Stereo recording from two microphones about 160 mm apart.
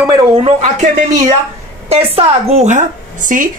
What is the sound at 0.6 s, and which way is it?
Speech, 50° right (ahead or behind).